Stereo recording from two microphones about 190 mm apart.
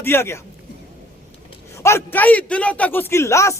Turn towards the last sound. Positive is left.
turn(degrees=15)  # may be behind; listen again after turning